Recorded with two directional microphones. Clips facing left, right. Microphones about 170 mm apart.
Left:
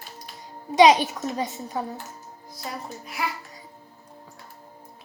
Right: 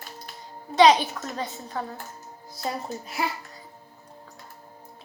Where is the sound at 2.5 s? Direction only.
25° right (ahead or behind).